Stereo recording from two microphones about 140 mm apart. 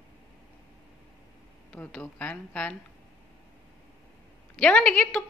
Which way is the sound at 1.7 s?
10° left (ahead or behind).